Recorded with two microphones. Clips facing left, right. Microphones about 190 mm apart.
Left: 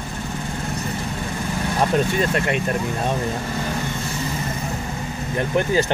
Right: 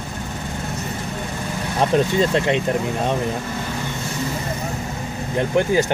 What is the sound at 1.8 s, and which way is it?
Speech, 20° right (ahead or behind).